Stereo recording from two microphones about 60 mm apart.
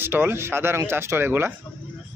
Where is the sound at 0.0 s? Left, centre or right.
Right.